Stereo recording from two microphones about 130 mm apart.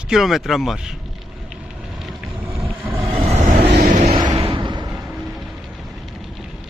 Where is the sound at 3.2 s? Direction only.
60° right (ahead or behind).